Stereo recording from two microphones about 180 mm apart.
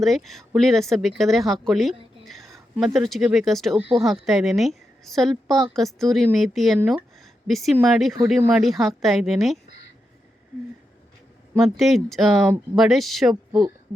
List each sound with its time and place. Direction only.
0.0 s speech: centre (ahead or behind)
3.8 s speech: 30° right (ahead or behind)
4.0 s speech: centre (ahead or behind)
11.5 s speech: centre (ahead or behind)